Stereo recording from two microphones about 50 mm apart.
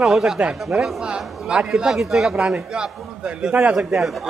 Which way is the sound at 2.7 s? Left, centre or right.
Centre.